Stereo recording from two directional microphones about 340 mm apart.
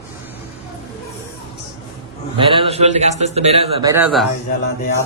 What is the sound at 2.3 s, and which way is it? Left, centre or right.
A man's voice, centre.